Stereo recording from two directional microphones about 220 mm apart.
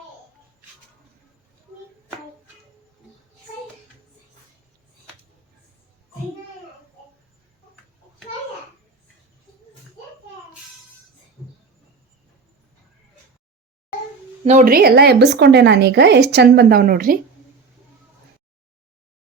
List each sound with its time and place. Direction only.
14.4 s a woman's voice: 35° right (ahead or behind)